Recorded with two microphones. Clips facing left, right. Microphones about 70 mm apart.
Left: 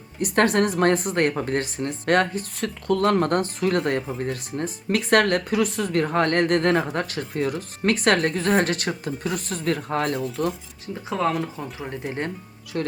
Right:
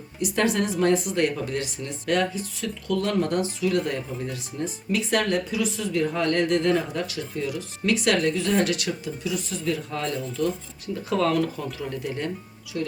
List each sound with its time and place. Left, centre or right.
0.2 s speech: left
11.1 s speech: left
12.7 s speech: left